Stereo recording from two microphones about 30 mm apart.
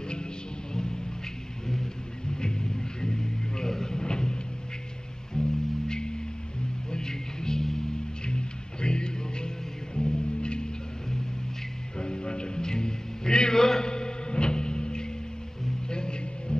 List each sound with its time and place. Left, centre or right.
2.3 s music: left
8.3 s music: left
12.0 s music: left